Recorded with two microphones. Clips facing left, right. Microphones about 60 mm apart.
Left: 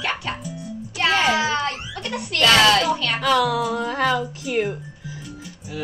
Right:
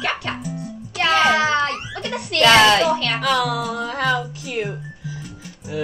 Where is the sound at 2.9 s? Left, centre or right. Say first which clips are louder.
Right 2 dB; right.